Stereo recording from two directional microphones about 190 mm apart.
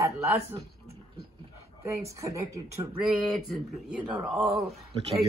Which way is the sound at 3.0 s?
Centre (ahead or behind).